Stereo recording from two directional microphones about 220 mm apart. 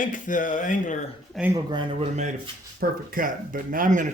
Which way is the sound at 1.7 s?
20° right (ahead or behind).